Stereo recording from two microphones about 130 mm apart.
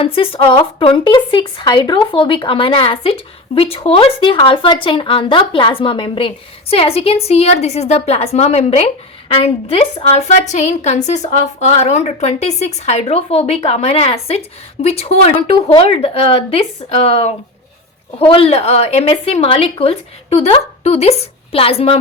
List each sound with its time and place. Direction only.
0.0 s a woman's voice: 45° left (ahead or behind)